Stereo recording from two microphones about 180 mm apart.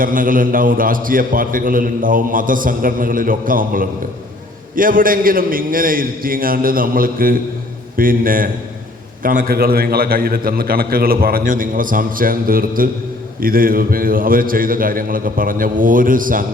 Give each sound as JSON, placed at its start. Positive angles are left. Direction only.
{"t": 0.0, "sound": "a man's voice", "side_deg": -50}